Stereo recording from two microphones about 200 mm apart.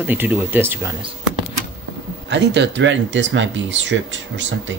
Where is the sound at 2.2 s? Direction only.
60° right (ahead or behind).